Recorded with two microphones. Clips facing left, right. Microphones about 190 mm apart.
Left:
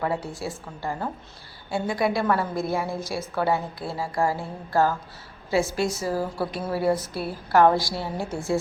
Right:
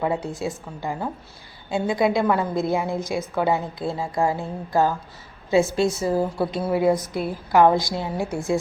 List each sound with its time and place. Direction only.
0.0 s a woman's voice: 20° right (ahead or behind)